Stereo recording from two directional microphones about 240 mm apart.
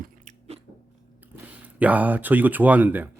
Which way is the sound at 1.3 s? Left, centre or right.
Centre.